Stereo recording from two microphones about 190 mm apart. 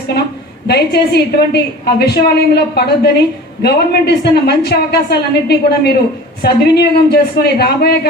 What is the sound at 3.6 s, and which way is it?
A woman's voice, 60° left (ahead or behind).